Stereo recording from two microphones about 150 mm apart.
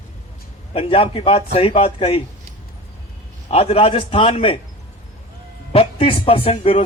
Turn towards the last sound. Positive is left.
turn(degrees=40)  # may be behind; listen again after turning